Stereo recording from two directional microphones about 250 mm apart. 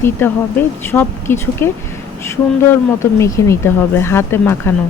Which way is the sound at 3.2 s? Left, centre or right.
Centre.